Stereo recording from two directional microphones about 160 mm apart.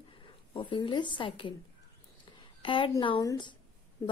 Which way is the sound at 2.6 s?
35° left (ahead or behind).